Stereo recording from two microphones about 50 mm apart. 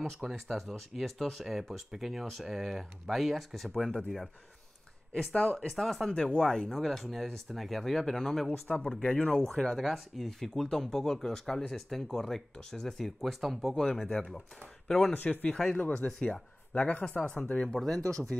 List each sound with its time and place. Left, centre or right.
0.3 s speech: centre
5.4 s speech: left
5.8 s speech: centre
6.7 s speech: centre
8.6 s speech: centre
9.5 s speech: centre
13.7 s speech: centre
15.1 s speech: left